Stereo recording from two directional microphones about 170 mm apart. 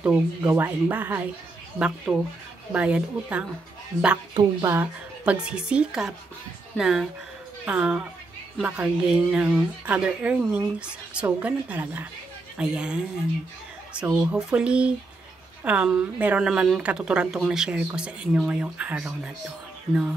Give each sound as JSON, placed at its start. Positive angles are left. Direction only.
{"t": 0.0, "sound": "speech", "side_deg": -10}
{"t": 4.3, "sound": "speech", "side_deg": -25}
{"t": 14.2, "sound": "speech", "side_deg": -5}